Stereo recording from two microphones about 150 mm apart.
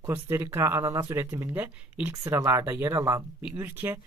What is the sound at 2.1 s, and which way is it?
Speech, 20° right (ahead or behind).